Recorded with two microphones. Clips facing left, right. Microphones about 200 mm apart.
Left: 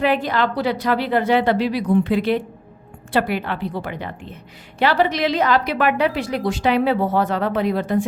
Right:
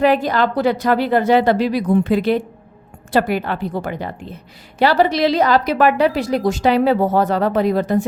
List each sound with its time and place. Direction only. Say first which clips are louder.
0.0 s a woman's voice: right 4 dB; 40° right (ahead or behind)